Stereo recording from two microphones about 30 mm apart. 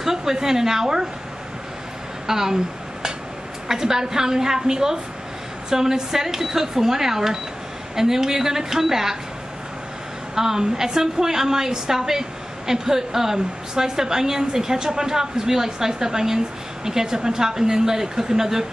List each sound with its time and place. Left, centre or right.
0.0 s a woman's voice: centre
2.2 s a sound: centre
3.6 s a woman's voice: centre
10.3 s a woman's voice: centre